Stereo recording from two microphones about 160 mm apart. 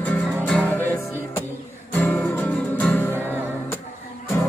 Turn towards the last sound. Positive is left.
turn(degrees=10)  # may be behind; listen again after turning